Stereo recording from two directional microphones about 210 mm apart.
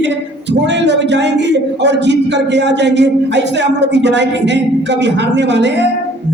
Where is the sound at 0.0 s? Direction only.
55° right (ahead or behind).